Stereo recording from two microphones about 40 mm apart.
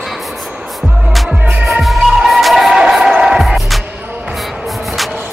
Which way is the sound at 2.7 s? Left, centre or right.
Centre.